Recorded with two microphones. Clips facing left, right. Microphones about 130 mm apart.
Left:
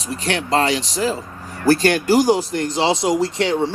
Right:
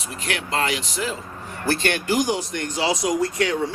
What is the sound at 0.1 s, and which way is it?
Speech, 35° left (ahead or behind).